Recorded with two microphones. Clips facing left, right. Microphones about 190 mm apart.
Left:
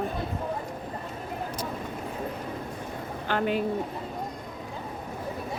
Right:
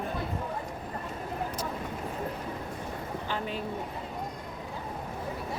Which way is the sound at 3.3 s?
70° left (ahead or behind).